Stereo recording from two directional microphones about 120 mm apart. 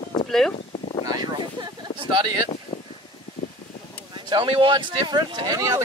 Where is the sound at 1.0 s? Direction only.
30° right (ahead or behind).